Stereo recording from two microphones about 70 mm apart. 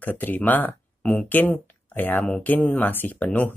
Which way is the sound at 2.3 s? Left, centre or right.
Centre.